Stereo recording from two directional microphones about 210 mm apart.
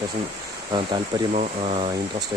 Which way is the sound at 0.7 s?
25° right (ahead or behind).